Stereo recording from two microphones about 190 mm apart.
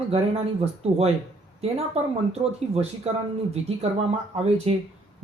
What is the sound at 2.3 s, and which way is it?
Speech, 30° right (ahead or behind).